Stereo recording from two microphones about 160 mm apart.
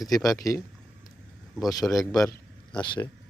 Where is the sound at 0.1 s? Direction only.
20° left (ahead or behind).